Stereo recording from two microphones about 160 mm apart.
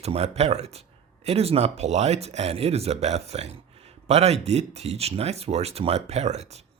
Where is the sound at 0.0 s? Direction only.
40° right (ahead or behind).